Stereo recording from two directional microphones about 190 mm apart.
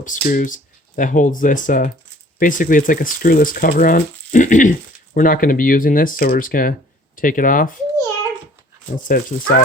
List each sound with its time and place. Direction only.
0.0 s speech: 45° left (ahead or behind)
9.0 s speech: 50° left (ahead or behind)